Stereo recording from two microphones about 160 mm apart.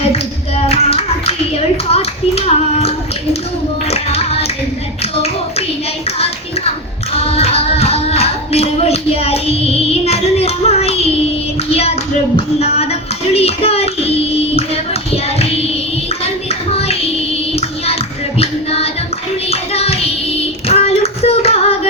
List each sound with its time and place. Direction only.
0.1 s clapping: 40° left (ahead or behind)
3.8 s music: 40° left (ahead or behind)
7.3 s music: 40° left (ahead or behind)
12.5 s child singing: 40° left (ahead or behind)
19.5 s music: 40° left (ahead or behind)
20.7 s child singing: 40° left (ahead or behind)